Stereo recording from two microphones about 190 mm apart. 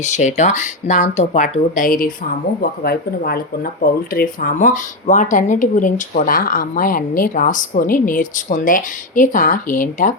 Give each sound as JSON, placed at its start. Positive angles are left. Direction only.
{"t": 0.0, "sound": "speech", "side_deg": 40}